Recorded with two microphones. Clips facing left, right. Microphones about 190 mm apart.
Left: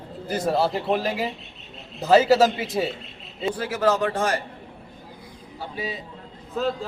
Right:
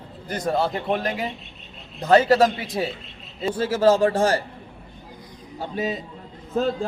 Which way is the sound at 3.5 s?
25° right (ahead or behind).